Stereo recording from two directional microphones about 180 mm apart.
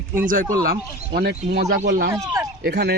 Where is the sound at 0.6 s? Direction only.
60° right (ahead or behind).